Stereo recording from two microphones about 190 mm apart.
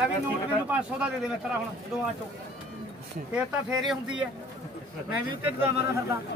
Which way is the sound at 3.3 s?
5° right (ahead or behind).